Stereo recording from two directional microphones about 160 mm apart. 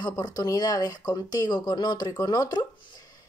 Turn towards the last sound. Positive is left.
turn(degrees=25)  # may be behind; listen again after turning